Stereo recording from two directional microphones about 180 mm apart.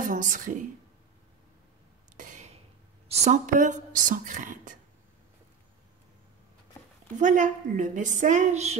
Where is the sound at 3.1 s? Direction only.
40° right (ahead or behind).